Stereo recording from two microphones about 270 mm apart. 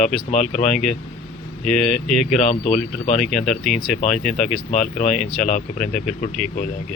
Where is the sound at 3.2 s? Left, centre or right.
Centre.